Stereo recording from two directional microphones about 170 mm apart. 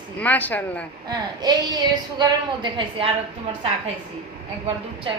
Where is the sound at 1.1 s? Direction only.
25° right (ahead or behind).